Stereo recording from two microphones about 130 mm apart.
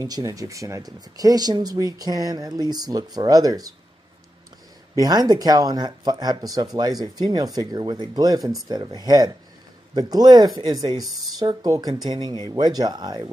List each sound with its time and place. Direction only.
0.0 s speech: 25° right (ahead or behind)
4.9 s speech: 30° right (ahead or behind)